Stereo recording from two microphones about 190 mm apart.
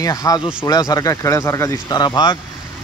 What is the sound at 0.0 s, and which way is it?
Speech, 20° left (ahead or behind).